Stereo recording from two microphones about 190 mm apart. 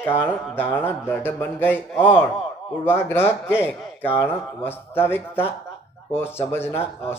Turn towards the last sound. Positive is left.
turn(degrees=10)  # may be behind; listen again after turning